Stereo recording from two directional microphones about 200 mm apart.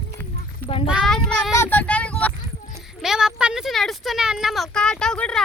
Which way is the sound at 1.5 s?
10° left (ahead or behind).